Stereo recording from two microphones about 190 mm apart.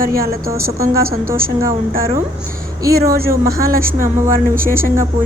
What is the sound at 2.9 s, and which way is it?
A woman's voice, 55° right (ahead or behind).